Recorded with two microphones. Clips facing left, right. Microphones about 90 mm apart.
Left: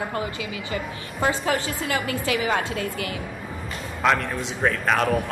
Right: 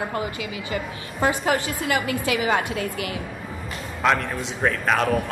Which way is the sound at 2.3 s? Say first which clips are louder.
Right 1 dB; 30° right (ahead or behind).